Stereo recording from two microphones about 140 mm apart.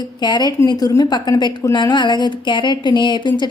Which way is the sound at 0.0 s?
30° left (ahead or behind).